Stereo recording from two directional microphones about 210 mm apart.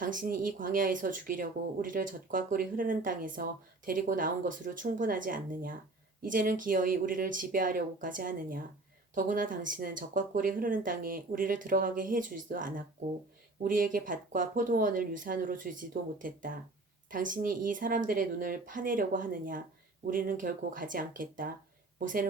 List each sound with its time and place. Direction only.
0.0 s a woman's voice: 40° right (ahead or behind)